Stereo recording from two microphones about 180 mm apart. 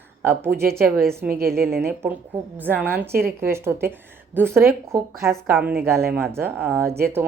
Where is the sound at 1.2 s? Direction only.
55° right (ahead or behind).